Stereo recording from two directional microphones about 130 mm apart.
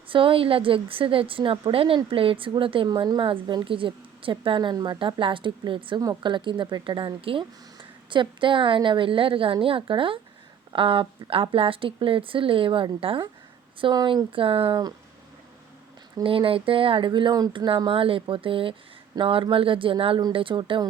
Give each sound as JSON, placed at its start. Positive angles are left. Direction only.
{"t": 0.1, "sound": "speech", "side_deg": -45}
{"t": 16.2, "sound": "speech", "side_deg": -45}